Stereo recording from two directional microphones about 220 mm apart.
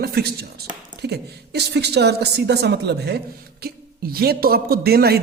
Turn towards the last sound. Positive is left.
turn(degrees=-45)  # may be behind; listen again after turning